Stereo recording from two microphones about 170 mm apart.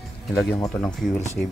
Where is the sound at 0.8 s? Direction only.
5° left (ahead or behind).